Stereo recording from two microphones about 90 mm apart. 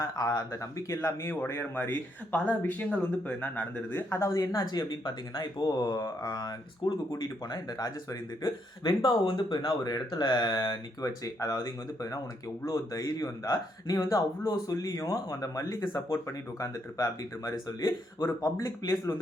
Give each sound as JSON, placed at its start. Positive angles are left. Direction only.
{"t": 0.0, "sound": "speech", "side_deg": 40}
{"t": 4.1, "sound": "speech", "side_deg": 35}
{"t": 5.0, "sound": "speech", "side_deg": 65}
{"t": 5.6, "sound": "speech", "side_deg": 45}
{"t": 8.4, "sound": "speech", "side_deg": 60}
{"t": 9.6, "sound": "speech", "side_deg": 50}
{"t": 11.0, "sound": "speech", "side_deg": 40}